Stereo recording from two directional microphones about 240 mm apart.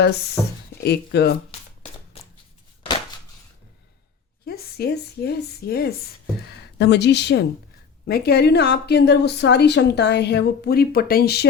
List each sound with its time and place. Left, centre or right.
0.4 s speech: centre
0.8 s a woman's voice: left
2.1 s shuffling cards: left
4.4 s a woman's voice: left